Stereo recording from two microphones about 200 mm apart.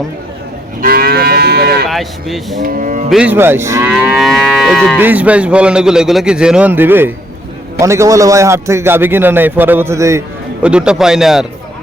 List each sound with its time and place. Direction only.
0.8 s moo: 50° right (ahead or behind)
1.9 s a man's voice: centre (ahead or behind)
2.6 s cattle: 45° right (ahead or behind)
3.1 s a man's voice: 5° right (ahead or behind)
4.9 s a man's voice: 10° right (ahead or behind)